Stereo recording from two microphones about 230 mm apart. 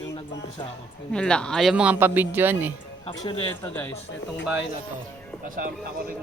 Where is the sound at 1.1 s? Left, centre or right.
Centre.